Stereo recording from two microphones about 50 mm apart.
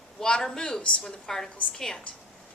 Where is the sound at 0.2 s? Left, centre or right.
Centre.